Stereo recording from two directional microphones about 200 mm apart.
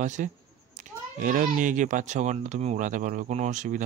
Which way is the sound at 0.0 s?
40° right (ahead or behind).